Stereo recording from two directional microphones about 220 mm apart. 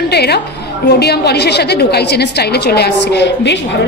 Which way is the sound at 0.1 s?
45° left (ahead or behind).